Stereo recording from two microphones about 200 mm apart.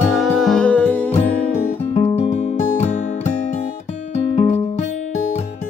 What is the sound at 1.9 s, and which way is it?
Music, 30° left (ahead or behind).